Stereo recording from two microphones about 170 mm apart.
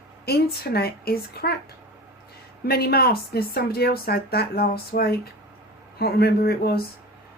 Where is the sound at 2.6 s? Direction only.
65° left (ahead or behind).